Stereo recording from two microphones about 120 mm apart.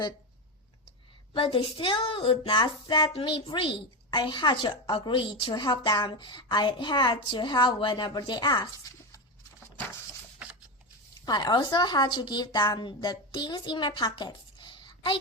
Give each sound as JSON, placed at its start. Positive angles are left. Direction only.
{"t": 1.3, "sound": "a woman's voice", "side_deg": 45}
{"t": 8.6, "sound": "a sound", "side_deg": 25}
{"t": 11.3, "sound": "a woman's voice", "side_deg": 35}